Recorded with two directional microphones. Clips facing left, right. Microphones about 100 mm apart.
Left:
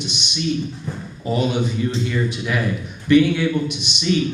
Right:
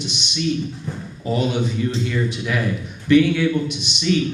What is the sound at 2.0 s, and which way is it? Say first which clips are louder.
Speech: even; 15° left (ahead or behind).